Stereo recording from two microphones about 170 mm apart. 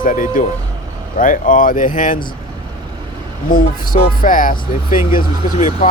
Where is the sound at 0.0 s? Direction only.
50° left (ahead or behind).